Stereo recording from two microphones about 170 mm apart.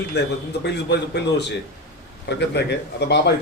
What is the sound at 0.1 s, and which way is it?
A man's voice, 80° left.